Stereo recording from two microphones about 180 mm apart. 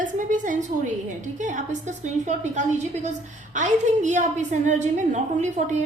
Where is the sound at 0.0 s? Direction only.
45° right (ahead or behind).